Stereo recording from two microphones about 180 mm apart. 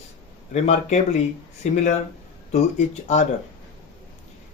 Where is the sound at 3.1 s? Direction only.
40° left (ahead or behind).